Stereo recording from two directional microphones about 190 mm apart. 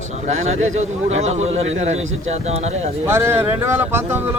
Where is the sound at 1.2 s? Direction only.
35° right (ahead or behind).